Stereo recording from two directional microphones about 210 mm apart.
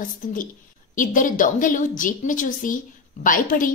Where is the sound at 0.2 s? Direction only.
40° left (ahead or behind).